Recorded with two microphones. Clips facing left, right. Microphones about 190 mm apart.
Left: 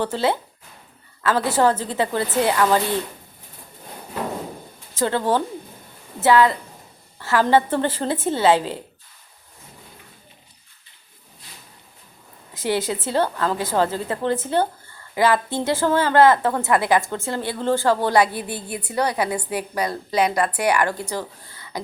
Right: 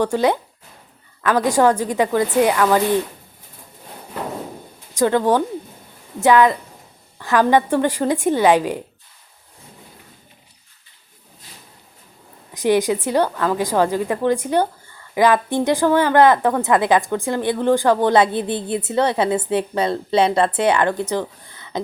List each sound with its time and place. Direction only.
0.0 s a woman's voice: 15° right (ahead or behind)
4.9 s a woman's voice: 15° right (ahead or behind)
12.5 s a woman's voice: 15° right (ahead or behind)